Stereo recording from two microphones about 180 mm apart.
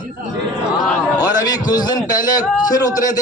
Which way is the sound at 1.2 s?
20° left (ahead or behind).